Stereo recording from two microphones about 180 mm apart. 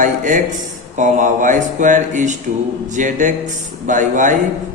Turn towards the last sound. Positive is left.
turn(degrees=-45)  # may be behind; listen again after turning